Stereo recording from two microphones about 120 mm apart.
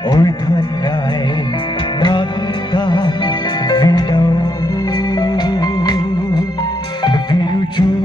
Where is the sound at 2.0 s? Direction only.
40° left (ahead or behind).